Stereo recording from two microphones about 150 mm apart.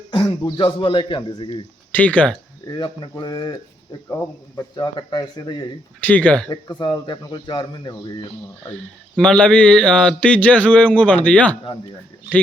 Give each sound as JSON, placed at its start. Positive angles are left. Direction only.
{"t": 0.1, "sound": "a man's voice", "side_deg": 30}
{"t": 1.9, "sound": "speech", "side_deg": 10}
{"t": 2.6, "sound": "speech", "side_deg": 30}
{"t": 6.0, "sound": "speech", "side_deg": 10}
{"t": 6.5, "sound": "speech", "side_deg": 30}
{"t": 9.1, "sound": "speech", "side_deg": 5}